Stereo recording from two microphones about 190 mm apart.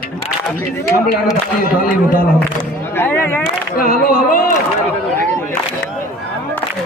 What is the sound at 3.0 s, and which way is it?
Speech, 10° left (ahead or behind).